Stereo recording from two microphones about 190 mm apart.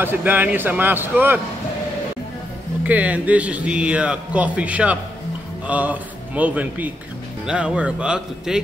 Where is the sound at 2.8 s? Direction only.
10° right (ahead or behind).